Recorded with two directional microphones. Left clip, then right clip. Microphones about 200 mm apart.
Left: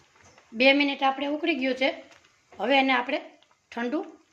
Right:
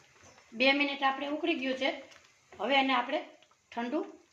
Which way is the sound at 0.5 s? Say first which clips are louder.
Left 6 dB; 55° left (ahead or behind).